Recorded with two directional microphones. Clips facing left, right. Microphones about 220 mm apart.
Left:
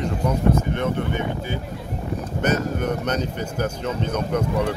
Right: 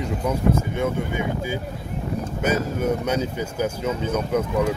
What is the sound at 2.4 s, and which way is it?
Speech, 5° right (ahead or behind).